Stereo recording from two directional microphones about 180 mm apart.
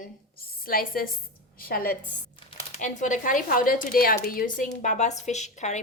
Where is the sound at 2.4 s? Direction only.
40° left (ahead or behind).